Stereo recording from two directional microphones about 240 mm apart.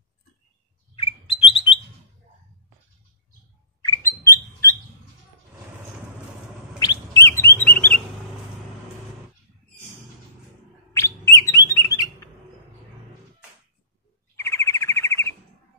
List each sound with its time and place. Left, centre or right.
1.3 s alarm: left
3.8 s rodents: centre
6.8 s bird: centre
10.9 s chirp: centre
14.3 s bird: centre